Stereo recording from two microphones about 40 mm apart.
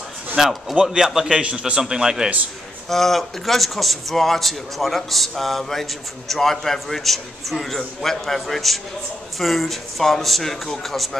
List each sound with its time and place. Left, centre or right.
0.4 s a man's voice: centre
0.9 s a man's voice: centre
1.4 s a man's voice: right
1.8 s a man's voice: centre
2.9 s a man's voice: centre